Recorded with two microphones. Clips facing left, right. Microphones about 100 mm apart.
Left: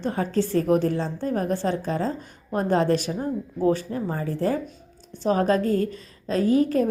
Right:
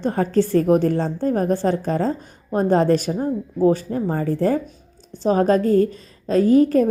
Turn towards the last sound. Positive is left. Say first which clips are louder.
# right 6 dB
turn(degrees=-40)  # may be behind; listen again after turning